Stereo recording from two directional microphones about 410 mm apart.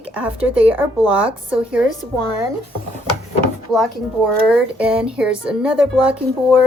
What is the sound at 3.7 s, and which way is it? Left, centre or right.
A woman's voice, centre.